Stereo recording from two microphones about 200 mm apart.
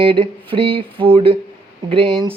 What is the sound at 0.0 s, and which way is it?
Speech, 25° right (ahead or behind).